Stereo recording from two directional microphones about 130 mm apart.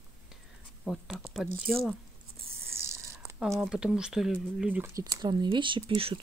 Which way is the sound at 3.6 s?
5° right (ahead or behind).